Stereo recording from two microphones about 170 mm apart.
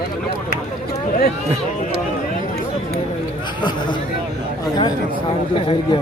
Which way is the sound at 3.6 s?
25° left (ahead or behind).